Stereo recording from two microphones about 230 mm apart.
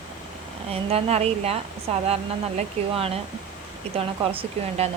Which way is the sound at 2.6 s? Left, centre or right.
Right.